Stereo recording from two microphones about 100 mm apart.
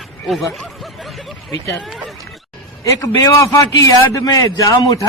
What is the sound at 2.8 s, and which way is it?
A man's voice, 30° left (ahead or behind).